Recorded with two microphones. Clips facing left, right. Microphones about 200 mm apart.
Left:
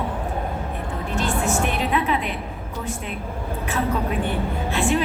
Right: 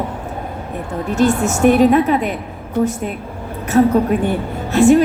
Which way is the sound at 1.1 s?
40° right (ahead or behind).